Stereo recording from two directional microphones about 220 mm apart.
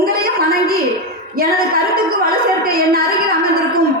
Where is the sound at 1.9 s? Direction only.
40° right (ahead or behind).